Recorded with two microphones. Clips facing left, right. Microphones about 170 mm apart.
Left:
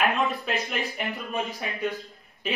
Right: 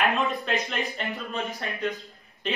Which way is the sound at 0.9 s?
15° left (ahead or behind).